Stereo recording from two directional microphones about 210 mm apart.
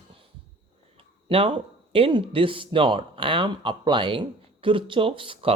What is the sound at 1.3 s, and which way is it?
Speech, 25° right (ahead or behind).